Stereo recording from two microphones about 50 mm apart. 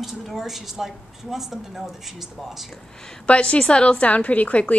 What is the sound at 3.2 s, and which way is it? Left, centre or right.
A woman's voice, left.